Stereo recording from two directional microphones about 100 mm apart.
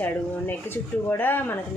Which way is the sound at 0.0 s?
20° left (ahead or behind).